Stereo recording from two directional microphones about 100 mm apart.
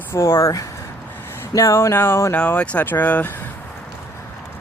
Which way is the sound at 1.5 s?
30° left (ahead or behind).